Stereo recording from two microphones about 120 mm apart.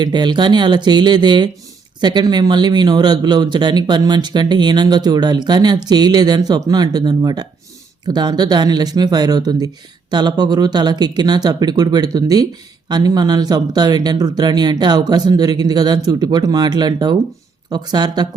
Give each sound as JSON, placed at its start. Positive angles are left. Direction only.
{"t": 0.0, "sound": "speech", "side_deg": -40}